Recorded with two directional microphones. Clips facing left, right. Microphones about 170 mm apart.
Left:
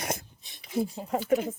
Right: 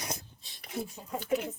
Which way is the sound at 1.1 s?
80° left.